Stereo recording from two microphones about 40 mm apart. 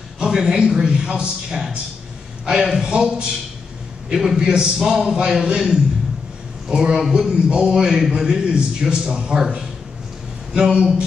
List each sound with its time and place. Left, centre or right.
0.2 s a man's voice: centre
4.7 s a man's voice: centre
5.1 s a man's voice: right
10.5 s a man's voice: centre